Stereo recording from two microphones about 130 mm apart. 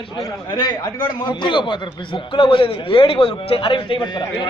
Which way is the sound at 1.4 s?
40° left (ahead or behind).